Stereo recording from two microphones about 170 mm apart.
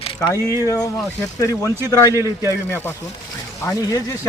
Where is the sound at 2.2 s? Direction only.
15° right (ahead or behind).